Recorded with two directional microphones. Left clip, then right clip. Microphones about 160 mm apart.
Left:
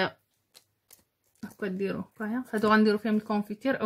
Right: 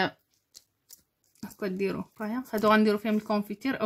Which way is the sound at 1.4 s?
45° right (ahead or behind).